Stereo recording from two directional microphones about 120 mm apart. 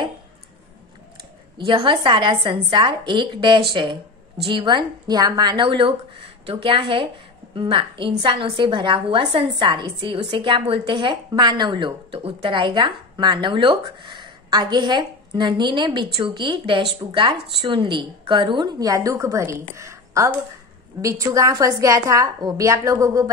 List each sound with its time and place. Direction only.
1.6 s a woman's voice: 45° right (ahead or behind); by 19.5 s 25° right (ahead or behind)
19.7 s a sound: 25° right (ahead or behind)
21.0 s a woman's voice: 30° right (ahead or behind)